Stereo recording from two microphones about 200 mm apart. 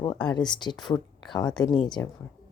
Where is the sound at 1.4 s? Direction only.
5° left (ahead or behind).